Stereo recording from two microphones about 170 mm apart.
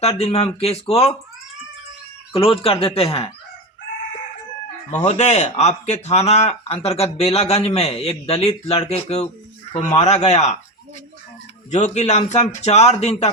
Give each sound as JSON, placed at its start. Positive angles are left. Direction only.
{"t": 0.0, "sound": "speech", "side_deg": 35}
{"t": 2.3, "sound": "speech", "side_deg": 35}
{"t": 5.0, "sound": "speech", "side_deg": 40}
{"t": 11.7, "sound": "speech", "side_deg": 40}